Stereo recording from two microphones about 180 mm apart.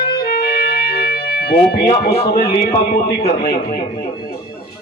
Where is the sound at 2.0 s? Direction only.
55° left (ahead or behind).